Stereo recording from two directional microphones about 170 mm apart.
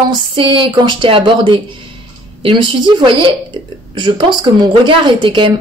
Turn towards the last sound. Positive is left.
turn(degrees=-30)  # may be behind; listen again after turning